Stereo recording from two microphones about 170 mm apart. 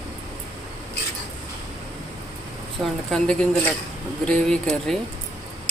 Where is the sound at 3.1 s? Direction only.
5° left (ahead or behind).